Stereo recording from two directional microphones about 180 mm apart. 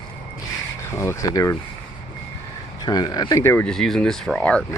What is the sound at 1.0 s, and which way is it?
Speech, 15° left (ahead or behind).